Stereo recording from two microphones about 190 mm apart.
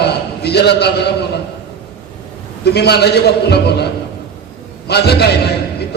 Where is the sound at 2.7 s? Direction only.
60° left (ahead or behind).